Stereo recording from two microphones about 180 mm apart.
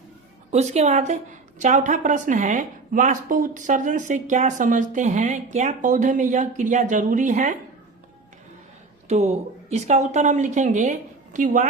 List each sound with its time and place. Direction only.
0.5 s a woman's voice: 40° right (ahead or behind)
9.0 s a woman's voice: 35° right (ahead or behind)